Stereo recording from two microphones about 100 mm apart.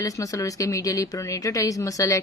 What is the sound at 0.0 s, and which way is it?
Speech, 35° left (ahead or behind).